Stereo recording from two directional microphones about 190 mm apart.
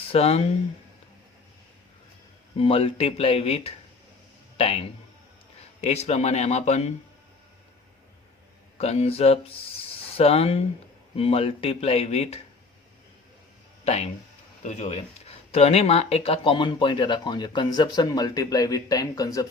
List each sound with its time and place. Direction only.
0.1 s speech: 30° left (ahead or behind)
2.6 s a man's voice: 30° left (ahead or behind)
8.8 s speech: 35° left (ahead or behind)
13.8 s speech: 35° left (ahead or behind); by 19.5 s 20° left (ahead or behind)